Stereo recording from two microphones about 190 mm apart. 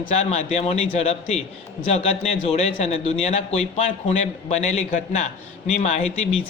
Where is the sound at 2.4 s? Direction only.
35° left (ahead or behind).